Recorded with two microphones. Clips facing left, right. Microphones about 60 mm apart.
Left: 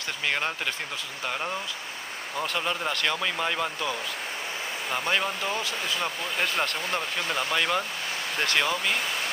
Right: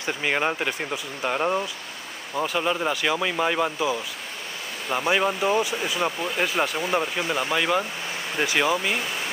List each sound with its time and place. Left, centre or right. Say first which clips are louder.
0.0 s speech: right 4 dB; centre
2.3 s speech: right 5 dB; centre